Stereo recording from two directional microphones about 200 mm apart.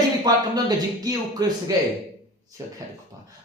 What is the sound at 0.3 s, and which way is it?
Speech, 20° right (ahead or behind).